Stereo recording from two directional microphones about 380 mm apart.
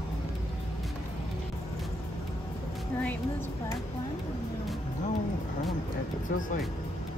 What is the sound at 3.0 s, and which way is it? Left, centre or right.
Music, centre.